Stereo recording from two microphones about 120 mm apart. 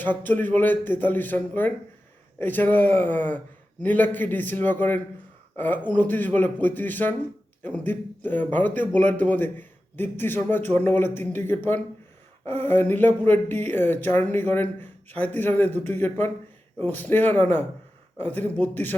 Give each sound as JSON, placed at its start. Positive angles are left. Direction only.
{"t": 0.0, "sound": "a man's voice", "side_deg": 15}